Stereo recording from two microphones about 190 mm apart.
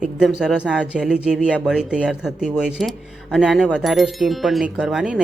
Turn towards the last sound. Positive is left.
turn(degrees=-5)  # may be behind; listen again after turning